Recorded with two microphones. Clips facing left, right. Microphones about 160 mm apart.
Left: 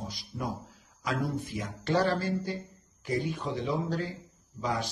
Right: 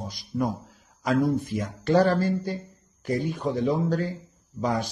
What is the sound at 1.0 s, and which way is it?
A man's voice, 45° right (ahead or behind).